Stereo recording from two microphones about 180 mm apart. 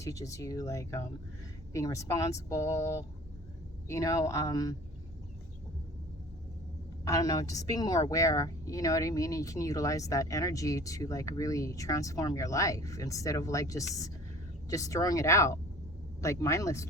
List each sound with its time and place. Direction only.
0.0 s a woman's voice: 15° left (ahead or behind)
7.0 s a woman's voice: 20° left (ahead or behind)